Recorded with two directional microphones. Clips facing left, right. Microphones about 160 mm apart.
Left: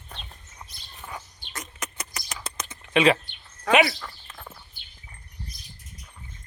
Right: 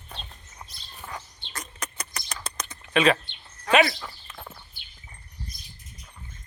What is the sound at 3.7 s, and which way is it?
Speech, 15° left (ahead or behind).